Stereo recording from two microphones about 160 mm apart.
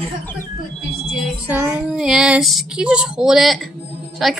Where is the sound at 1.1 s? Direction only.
Centre (ahead or behind).